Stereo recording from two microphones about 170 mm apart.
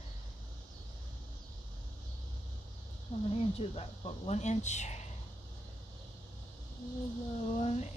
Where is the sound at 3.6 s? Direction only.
40° left (ahead or behind).